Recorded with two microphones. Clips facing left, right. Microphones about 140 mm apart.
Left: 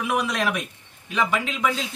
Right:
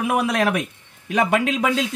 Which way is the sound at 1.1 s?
70° right (ahead or behind).